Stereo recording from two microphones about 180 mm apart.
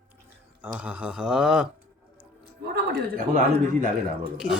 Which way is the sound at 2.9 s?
55° right (ahead or behind).